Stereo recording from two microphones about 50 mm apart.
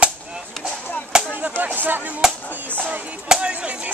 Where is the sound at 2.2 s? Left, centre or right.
Centre.